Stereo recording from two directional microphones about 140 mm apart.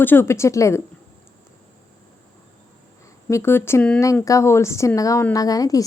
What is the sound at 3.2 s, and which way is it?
A woman's voice, 20° left (ahead or behind).